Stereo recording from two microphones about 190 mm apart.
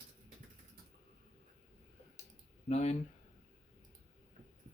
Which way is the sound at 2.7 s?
35° left (ahead or behind).